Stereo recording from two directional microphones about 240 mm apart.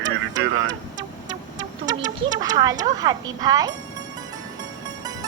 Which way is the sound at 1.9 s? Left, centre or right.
Centre.